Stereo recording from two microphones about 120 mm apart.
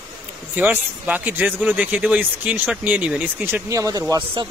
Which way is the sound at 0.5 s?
15° right (ahead or behind).